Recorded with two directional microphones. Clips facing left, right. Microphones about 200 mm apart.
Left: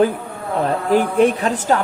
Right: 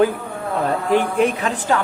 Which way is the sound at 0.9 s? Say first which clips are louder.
Left 3 dB; 35° left (ahead or behind).